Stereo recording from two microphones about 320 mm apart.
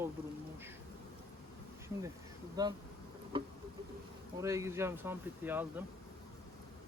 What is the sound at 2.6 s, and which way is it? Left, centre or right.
Speech, centre.